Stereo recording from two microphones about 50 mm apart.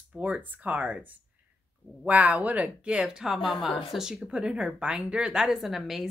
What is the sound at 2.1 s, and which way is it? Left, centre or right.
Speech, right.